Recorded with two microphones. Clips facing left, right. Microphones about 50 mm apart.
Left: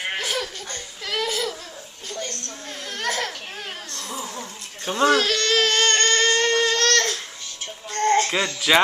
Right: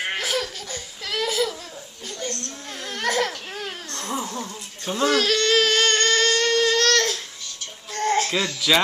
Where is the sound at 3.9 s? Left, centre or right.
Right.